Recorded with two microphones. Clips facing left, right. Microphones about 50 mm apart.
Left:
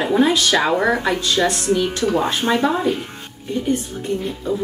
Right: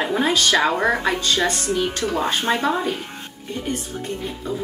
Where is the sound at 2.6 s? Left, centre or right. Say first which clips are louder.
Left 3 dB; centre.